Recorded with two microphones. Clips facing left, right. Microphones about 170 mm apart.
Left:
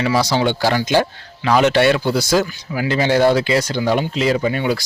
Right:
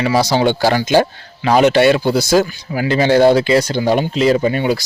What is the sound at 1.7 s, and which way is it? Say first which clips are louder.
Speech: right 3 dB; 5° right (ahead or behind).